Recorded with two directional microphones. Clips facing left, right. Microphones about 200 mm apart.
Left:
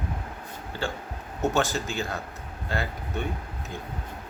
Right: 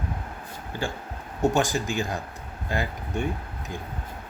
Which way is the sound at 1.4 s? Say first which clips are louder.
Right 2 dB; 15° right (ahead or behind).